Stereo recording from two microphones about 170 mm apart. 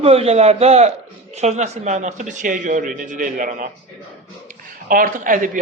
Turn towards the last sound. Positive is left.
turn(degrees=-50)  # may be behind; listen again after turning